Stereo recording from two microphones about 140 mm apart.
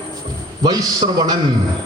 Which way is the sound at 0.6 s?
30° right (ahead or behind).